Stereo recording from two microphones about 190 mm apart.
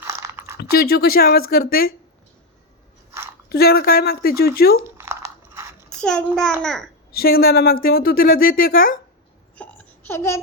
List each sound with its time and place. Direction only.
0.0 s a sound: 15° right (ahead or behind)
0.5 s a woman's voice: 55° left (ahead or behind)
3.5 s speech: 55° left (ahead or behind)
5.0 s a sound: 10° right (ahead or behind)
6.0 s a child's voice: 5° left (ahead or behind)
7.1 s a woman's voice: 55° left (ahead or behind)
9.6 s babbling: 10° left (ahead or behind)